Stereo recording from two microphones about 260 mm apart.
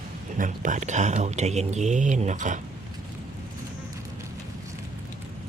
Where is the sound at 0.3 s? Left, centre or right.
Right.